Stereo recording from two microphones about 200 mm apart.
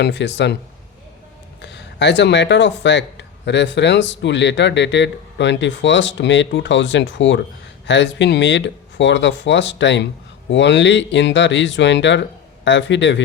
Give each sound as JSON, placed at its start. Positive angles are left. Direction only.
{"t": 0.0, "sound": "speech", "side_deg": 60}
{"t": 1.6, "sound": "speech", "side_deg": 60}